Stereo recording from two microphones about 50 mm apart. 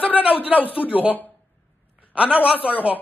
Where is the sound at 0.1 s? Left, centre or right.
Right.